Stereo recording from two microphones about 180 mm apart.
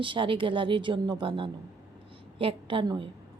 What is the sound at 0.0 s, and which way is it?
A woman's voice, 30° right (ahead or behind).